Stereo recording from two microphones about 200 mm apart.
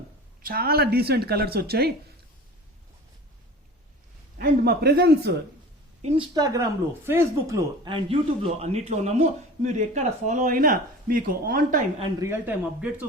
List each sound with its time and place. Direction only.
0.4 s speech: 50° right (ahead or behind)
4.4 s speech: 50° right (ahead or behind)
6.0 s a woman's voice: 35° right (ahead or behind)
6.3 s speech: 20° right (ahead or behind); by 11.9 s 45° right (ahead or behind)
12.2 s speech: 10° right (ahead or behind)